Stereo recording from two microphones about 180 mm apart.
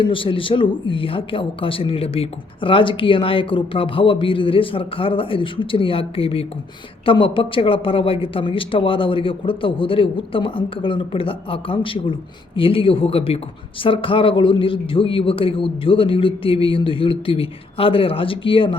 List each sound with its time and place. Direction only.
0.0 s speech: 30° left (ahead or behind)